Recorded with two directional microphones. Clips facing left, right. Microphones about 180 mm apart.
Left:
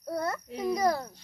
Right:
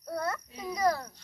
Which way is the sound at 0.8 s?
25° left (ahead or behind).